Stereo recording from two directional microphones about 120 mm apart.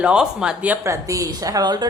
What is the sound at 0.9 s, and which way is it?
Speech, 25° right (ahead or behind).